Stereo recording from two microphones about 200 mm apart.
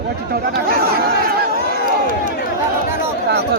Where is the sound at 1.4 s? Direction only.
45° right (ahead or behind).